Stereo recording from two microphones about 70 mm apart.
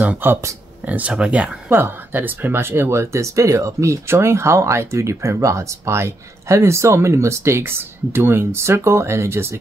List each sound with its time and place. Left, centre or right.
0.0 s speech: right
0.3 s speech: right
0.8 s speech: right
1.7 s speech: right